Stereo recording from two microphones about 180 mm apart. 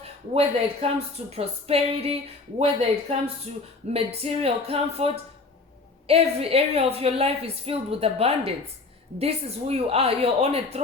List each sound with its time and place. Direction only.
0.0 s a woman's voice: 35° right (ahead or behind)